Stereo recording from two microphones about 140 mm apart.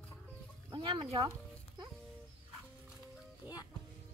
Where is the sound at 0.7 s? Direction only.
35° right (ahead or behind).